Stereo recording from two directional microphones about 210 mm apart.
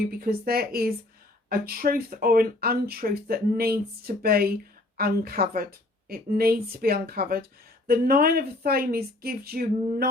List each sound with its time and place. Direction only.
0.1 s speech: 45° right (ahead or behind)